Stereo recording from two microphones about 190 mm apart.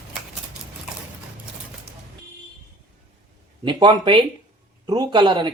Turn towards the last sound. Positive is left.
turn(degrees=-25)  # may be behind; listen again after turning